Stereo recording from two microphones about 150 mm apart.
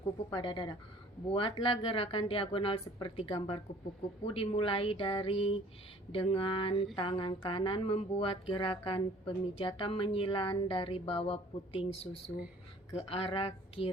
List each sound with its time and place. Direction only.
0.0 s speech: 30° left (ahead or behind)
13.0 s speech: 40° left (ahead or behind)